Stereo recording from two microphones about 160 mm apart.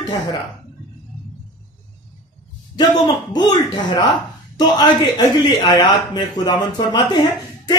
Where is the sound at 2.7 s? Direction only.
25° left (ahead or behind).